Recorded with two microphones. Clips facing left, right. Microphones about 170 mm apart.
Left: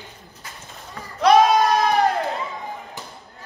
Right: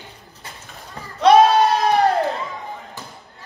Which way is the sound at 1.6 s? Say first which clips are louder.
Right 2 dB; 35° right (ahead or behind).